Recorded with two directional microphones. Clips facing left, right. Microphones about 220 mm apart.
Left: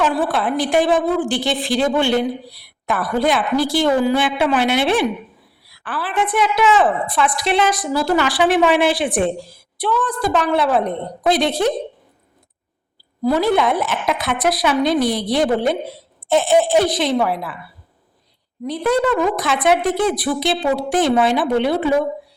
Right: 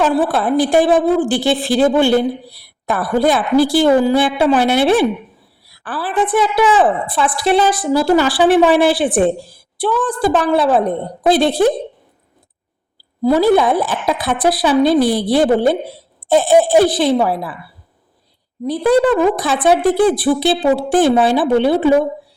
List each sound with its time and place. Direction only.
0.0 s a woman's voice: 35° right (ahead or behind)
1.3 s speech: 5° right (ahead or behind)
1.9 s a woman's voice: 35° right (ahead or behind)
13.6 s a woman's voice: 35° right (ahead or behind)
18.6 s a woman's voice: 30° right (ahead or behind)